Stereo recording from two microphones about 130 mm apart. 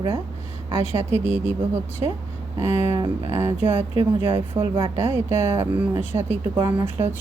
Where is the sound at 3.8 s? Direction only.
45° right (ahead or behind).